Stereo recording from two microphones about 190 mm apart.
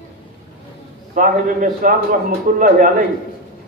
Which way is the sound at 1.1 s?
45° right (ahead or behind).